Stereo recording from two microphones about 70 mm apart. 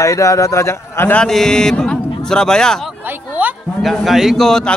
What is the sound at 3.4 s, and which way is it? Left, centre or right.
Speech, right.